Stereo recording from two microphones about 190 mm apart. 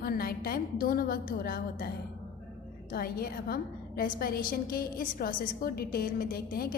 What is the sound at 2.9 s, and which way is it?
A woman's voice, 50° left (ahead or behind).